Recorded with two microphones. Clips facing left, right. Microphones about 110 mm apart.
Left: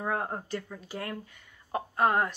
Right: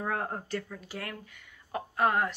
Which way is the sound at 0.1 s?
20° left (ahead or behind).